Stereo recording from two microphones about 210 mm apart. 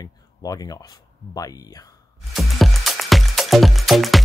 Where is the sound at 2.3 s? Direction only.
Centre (ahead or behind).